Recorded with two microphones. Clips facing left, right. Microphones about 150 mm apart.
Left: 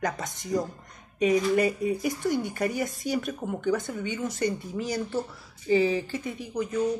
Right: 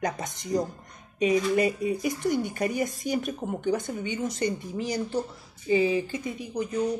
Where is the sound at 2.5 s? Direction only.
20° right (ahead or behind).